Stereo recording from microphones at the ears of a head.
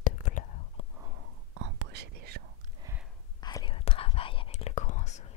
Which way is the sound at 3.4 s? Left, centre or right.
Left.